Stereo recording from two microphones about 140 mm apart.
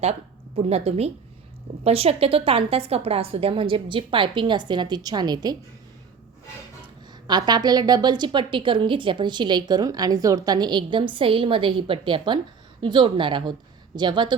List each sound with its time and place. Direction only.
0.0 s a woman's voice: 50° right (ahead or behind); by 5.5 s 30° right (ahead or behind)
6.8 s a woman's voice: 30° right (ahead or behind)